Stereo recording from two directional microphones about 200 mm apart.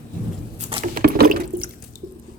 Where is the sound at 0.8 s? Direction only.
50° right (ahead or behind).